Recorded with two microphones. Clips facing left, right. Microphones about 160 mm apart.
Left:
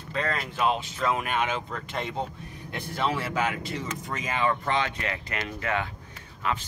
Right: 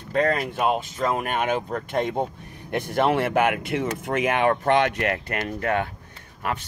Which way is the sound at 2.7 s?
65° right (ahead or behind).